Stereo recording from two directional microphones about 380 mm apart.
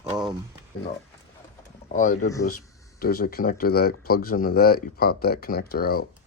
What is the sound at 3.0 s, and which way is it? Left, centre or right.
Speech, left.